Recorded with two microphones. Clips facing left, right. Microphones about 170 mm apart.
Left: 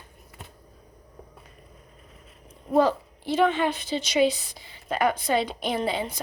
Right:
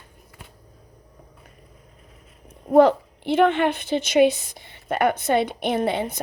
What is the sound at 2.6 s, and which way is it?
A woman's voice, 60° right (ahead or behind).